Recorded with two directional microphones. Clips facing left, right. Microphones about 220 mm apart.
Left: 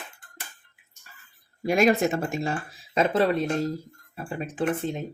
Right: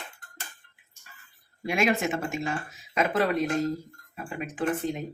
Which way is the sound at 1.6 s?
40° left (ahead or behind).